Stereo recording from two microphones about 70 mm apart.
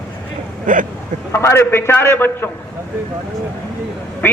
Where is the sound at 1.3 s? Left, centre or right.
Left.